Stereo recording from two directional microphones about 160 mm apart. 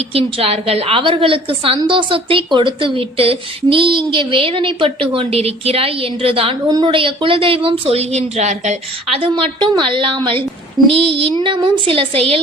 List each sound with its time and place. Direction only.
0.1 s a woman's voice: 35° right (ahead or behind)